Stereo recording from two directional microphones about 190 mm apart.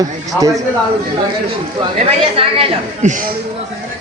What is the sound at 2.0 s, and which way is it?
Speech, 30° right (ahead or behind).